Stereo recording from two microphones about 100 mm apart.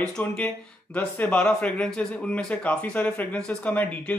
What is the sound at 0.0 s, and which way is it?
Speech, 10° left (ahead or behind).